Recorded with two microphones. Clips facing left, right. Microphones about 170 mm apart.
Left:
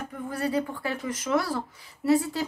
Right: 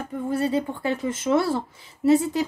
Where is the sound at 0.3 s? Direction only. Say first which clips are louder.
Right 4 dB; 25° right (ahead or behind).